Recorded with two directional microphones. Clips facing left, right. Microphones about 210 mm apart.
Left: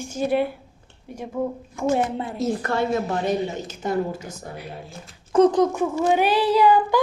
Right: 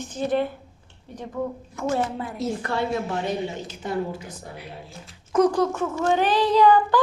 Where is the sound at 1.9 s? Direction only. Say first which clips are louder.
Left 3 dB; 20° left (ahead or behind).